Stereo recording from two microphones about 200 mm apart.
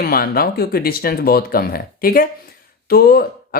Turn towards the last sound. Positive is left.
turn(degrees=50)  # may be behind; listen again after turning